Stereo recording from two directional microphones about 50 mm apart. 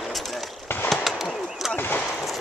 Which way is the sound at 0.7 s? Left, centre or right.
Left.